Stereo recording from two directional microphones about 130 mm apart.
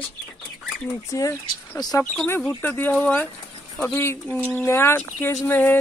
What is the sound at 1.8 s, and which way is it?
Speech, 30° left (ahead or behind).